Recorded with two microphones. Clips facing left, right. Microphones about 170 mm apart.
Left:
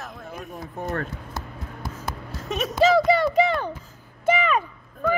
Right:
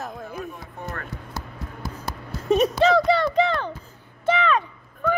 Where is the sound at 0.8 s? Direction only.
35° left (ahead or behind).